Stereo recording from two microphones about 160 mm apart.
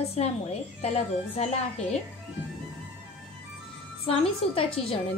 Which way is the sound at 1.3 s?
45° left (ahead or behind).